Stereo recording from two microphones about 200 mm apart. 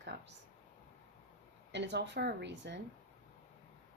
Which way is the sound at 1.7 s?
60° right (ahead or behind).